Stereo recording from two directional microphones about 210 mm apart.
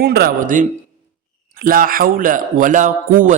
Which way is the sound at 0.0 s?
50° right (ahead or behind).